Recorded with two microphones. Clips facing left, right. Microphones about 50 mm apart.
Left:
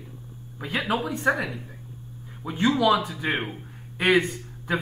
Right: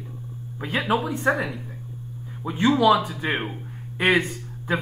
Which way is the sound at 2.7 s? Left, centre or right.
Centre.